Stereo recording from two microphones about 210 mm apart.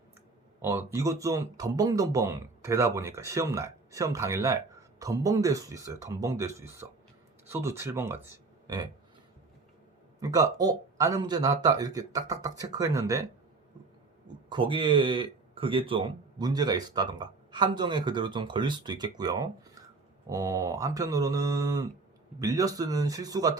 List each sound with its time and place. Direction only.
0.6 s speech: 10° right (ahead or behind)
10.2 s speech: 15° right (ahead or behind)
14.5 s speech: 25° right (ahead or behind)